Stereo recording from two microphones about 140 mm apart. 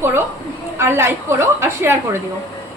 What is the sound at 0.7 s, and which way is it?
A woman's voice, 20° right (ahead or behind).